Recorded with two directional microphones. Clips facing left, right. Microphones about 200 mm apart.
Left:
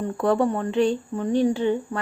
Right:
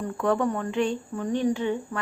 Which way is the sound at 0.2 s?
35° left (ahead or behind).